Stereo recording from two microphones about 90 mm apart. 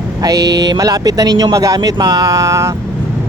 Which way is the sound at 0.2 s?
45° right (ahead or behind).